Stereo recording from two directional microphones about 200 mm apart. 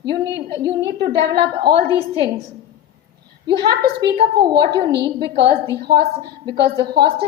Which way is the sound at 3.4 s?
20° right (ahead or behind).